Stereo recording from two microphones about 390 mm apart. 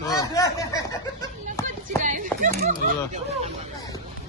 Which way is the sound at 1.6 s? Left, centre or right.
Centre.